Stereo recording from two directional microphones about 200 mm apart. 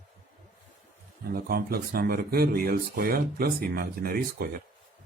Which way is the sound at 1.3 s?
50° right (ahead or behind).